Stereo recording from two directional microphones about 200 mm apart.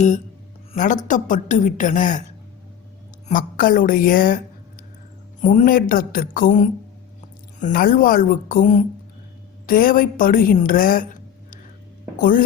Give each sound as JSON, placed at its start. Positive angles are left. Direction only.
{"t": 0.7, "sound": "a woman's voice", "side_deg": 40}
{"t": 3.2, "sound": "a woman's voice", "side_deg": 45}
{"t": 5.4, "sound": "a woman's voice", "side_deg": 40}